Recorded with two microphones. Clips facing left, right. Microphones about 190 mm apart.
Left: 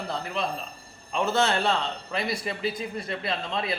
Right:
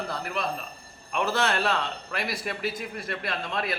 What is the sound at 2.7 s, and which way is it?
A man's voice, 25° left (ahead or behind).